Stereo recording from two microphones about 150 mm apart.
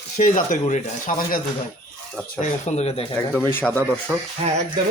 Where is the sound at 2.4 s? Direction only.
50° left (ahead or behind).